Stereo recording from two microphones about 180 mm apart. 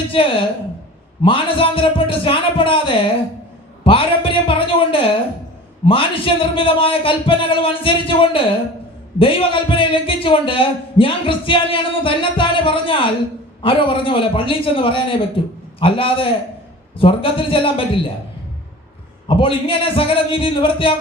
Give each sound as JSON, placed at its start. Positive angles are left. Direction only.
{"t": 0.1, "sound": "a man's voice", "side_deg": 30}
{"t": 19.3, "sound": "a man's voice", "side_deg": 30}